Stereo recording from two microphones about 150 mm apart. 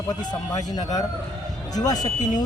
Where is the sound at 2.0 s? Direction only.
55° left (ahead or behind).